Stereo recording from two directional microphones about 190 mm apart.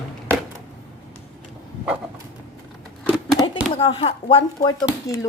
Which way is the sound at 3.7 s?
30° left (ahead or behind).